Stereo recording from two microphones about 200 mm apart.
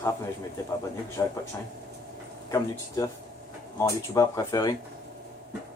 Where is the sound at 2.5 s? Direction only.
15° left (ahead or behind).